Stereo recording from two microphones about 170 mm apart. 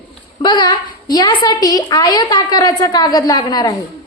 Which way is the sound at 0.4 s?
25° left (ahead or behind).